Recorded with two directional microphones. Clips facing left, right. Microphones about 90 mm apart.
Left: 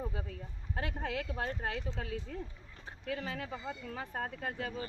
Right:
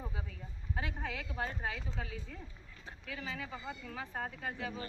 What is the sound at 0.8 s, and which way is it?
Speech, 55° left (ahead or behind).